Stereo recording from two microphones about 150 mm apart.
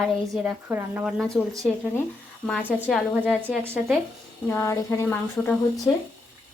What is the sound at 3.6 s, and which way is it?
Speech, 15° right (ahead or behind).